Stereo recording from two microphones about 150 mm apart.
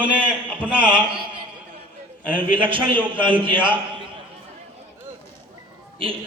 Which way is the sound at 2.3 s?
35° right (ahead or behind).